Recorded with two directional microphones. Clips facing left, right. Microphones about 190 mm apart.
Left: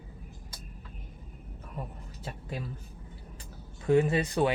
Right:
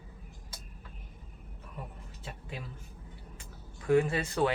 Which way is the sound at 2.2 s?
40° left (ahead or behind).